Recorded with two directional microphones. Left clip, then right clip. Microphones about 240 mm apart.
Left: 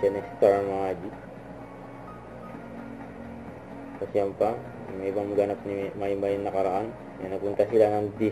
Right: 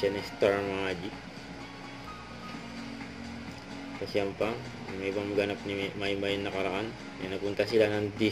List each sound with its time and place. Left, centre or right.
0.0 s speech: right
4.1 s speech: right